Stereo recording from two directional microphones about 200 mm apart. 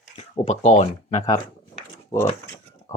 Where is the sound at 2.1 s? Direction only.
15° left (ahead or behind).